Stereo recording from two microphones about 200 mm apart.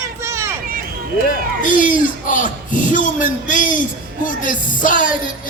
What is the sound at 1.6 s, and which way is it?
A man's voice, 40° left (ahead or behind).